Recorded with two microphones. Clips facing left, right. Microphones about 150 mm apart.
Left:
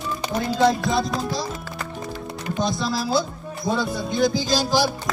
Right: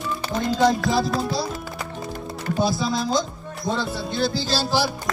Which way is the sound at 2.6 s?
5° right (ahead or behind).